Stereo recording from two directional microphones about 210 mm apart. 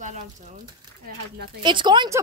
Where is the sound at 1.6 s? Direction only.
20° right (ahead or behind).